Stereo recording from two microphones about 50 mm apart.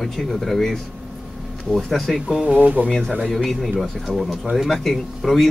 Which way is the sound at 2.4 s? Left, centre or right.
Right.